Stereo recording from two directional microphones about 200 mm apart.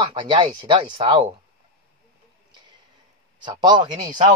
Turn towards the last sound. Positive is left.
turn(degrees=-20)  # may be behind; listen again after turning